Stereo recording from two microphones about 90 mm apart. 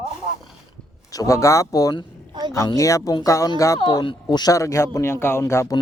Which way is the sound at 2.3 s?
55° right (ahead or behind).